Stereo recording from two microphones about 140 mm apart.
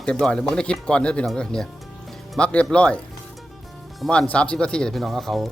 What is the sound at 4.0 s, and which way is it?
Speech, 5° left (ahead or behind).